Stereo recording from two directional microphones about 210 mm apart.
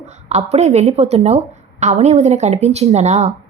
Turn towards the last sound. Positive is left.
turn(degrees=-30)  # may be behind; listen again after turning